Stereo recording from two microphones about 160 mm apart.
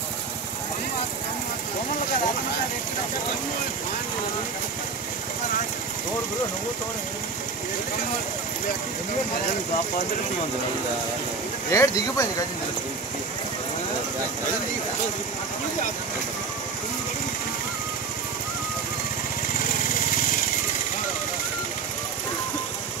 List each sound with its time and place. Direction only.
11.7 s speech: 20° left (ahead or behind)